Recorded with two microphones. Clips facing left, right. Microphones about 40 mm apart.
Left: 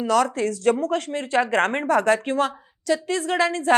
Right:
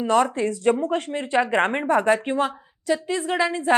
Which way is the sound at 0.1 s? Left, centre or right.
Right.